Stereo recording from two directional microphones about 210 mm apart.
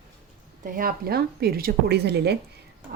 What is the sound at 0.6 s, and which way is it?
Speech, 40° right (ahead or behind).